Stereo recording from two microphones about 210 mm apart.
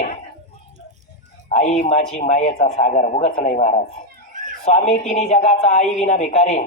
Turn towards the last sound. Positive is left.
turn(degrees=30)  # may be behind; listen again after turning